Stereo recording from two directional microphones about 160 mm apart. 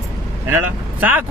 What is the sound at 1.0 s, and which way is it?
Speech, 10° right (ahead or behind).